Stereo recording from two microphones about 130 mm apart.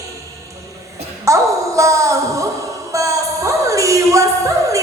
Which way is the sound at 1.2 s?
25° right (ahead or behind).